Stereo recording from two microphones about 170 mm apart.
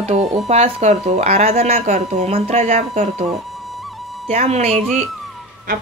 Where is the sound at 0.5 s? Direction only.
40° right (ahead or behind).